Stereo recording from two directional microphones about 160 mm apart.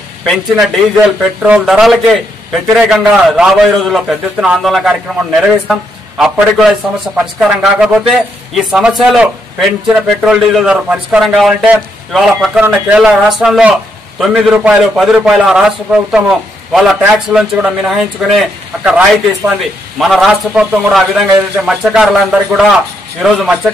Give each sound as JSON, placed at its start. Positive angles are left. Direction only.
{"t": 0.2, "sound": "a man's voice", "side_deg": 0}
{"t": 7.3, "sound": "a man's voice", "side_deg": -5}